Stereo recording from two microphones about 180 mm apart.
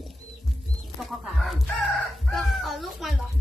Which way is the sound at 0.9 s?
Centre (ahead or behind).